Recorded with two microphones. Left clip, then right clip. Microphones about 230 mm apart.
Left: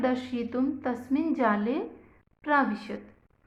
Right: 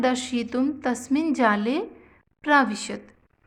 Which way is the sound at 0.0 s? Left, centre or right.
Right.